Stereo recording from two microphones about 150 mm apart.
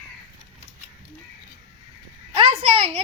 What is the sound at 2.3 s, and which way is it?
Speech, 40° right (ahead or behind).